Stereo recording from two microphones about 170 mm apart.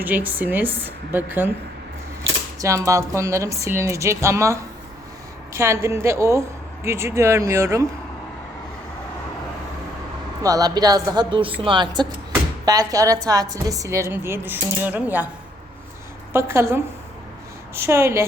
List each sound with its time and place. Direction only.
0.0 s speech: 10° right (ahead or behind)
2.6 s speech: 20° right (ahead or behind)
10.4 s a woman's voice: 20° right (ahead or behind)
16.3 s speech: 15° right (ahead or behind)